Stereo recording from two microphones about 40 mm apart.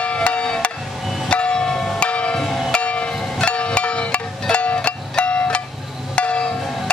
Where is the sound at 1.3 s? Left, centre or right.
Left.